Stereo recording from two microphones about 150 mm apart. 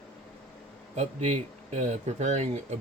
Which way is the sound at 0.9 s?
50° right (ahead or behind).